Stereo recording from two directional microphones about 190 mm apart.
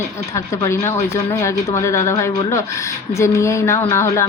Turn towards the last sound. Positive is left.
turn(degrees=15)  # may be behind; listen again after turning